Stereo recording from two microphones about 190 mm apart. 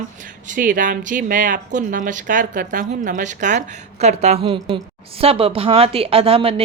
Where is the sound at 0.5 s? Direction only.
45° right (ahead or behind).